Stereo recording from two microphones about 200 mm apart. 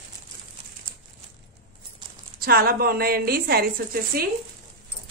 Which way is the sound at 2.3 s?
50° right (ahead or behind).